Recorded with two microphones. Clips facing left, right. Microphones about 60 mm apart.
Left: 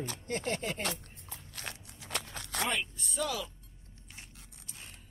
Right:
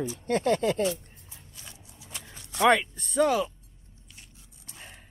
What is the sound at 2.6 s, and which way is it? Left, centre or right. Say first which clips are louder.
Speech: right 13 dB; right.